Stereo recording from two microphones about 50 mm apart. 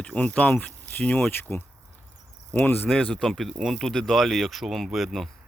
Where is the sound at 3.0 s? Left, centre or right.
Centre.